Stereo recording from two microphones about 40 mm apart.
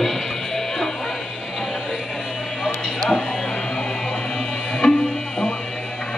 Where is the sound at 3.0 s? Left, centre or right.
Centre.